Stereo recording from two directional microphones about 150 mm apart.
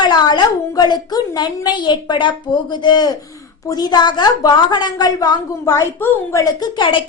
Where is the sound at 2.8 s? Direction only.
30° left (ahead or behind).